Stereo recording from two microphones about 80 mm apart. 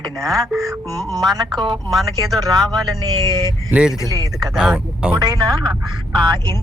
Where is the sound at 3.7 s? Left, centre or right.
Centre.